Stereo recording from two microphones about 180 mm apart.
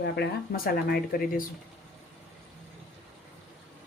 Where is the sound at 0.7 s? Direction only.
55° left (ahead or behind).